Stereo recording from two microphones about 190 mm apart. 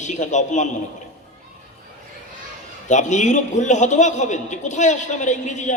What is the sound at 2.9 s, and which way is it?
A man's voice, 40° left (ahead or behind).